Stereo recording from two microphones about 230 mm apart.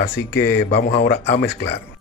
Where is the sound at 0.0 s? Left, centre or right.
Left.